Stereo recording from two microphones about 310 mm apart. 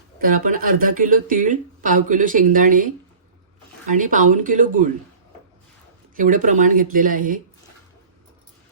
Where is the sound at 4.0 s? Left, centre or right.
Right.